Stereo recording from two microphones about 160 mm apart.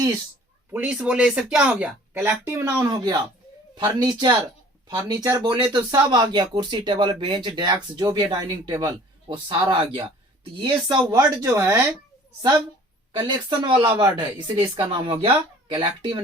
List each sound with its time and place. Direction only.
0.7 s speech: 10° right (ahead or behind)
13.1 s speech: 30° right (ahead or behind)